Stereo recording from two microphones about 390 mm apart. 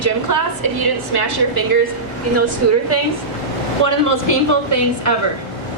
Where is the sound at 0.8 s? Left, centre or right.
Right.